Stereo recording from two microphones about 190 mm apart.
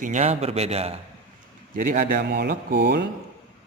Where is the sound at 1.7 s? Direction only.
45° right (ahead or behind).